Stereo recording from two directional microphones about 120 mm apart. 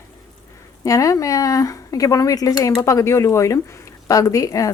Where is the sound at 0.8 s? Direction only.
25° left (ahead or behind).